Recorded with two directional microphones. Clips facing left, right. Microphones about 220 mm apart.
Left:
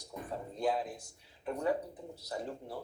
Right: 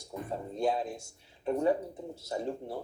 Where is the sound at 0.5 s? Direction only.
25° right (ahead or behind).